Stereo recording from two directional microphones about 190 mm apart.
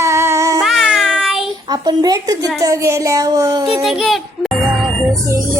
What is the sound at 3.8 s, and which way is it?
Speech, centre (ahead or behind).